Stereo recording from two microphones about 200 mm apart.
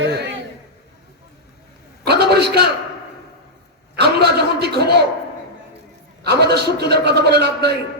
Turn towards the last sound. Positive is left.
turn(degrees=-55)  # may be behind; listen again after turning